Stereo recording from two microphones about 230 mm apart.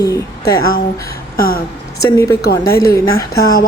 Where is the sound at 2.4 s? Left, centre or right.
Left.